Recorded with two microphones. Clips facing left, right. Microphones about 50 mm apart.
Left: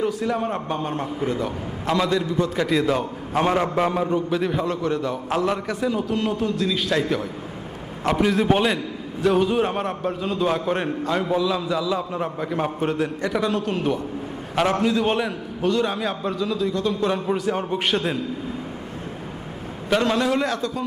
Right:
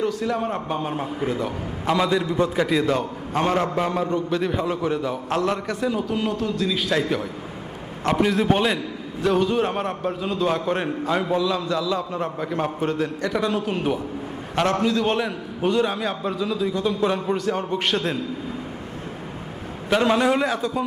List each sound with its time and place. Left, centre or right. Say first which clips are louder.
0.0 s a man's voice: even; centre
2.6 s a man's voice: even; centre
8.0 s a man's voice: even; centre
19.9 s a man's voice: right 1 dB; centre